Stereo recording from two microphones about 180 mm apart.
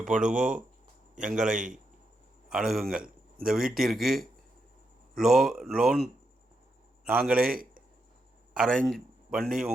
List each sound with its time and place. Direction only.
0.0 s speech: 5° right (ahead or behind)
7.4 s a man's voice: 55° right (ahead or behind)
8.5 s a man's voice: 5° left (ahead or behind)